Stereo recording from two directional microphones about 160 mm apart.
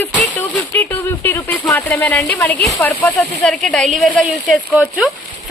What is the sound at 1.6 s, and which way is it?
Speech, 10° left (ahead or behind).